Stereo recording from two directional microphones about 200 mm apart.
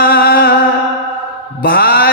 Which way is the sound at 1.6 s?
50° left (ahead or behind).